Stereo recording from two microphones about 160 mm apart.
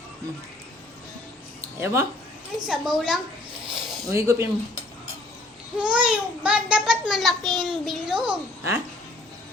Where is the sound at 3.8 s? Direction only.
Centre (ahead or behind).